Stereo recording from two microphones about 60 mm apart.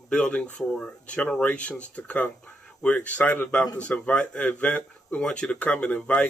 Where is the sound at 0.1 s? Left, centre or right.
Left.